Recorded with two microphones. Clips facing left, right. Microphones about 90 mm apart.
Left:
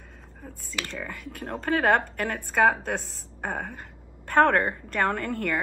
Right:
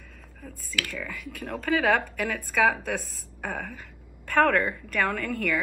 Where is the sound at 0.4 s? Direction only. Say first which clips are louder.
Right 2 dB; 30° left (ahead or behind).